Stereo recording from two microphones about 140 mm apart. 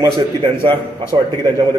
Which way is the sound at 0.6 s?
30° right (ahead or behind).